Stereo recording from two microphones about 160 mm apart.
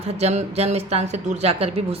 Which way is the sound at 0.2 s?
40° right (ahead or behind).